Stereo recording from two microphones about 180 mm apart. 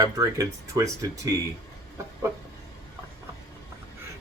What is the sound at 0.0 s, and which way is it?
Speech, 20° right (ahead or behind).